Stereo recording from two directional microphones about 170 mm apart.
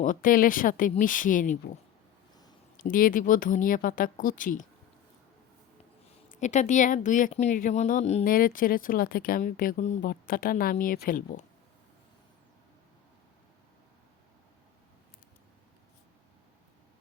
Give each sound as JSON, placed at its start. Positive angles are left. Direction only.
{"t": 0.0, "sound": "speech", "side_deg": 50}
{"t": 2.8, "sound": "speech", "side_deg": 55}
{"t": 6.4, "sound": "speech", "side_deg": 45}
{"t": 8.3, "sound": "speech", "side_deg": 55}